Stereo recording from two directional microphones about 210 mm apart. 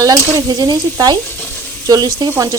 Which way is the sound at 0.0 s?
15° right (ahead or behind).